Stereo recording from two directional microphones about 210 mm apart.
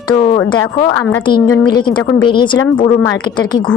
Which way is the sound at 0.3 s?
20° left (ahead or behind).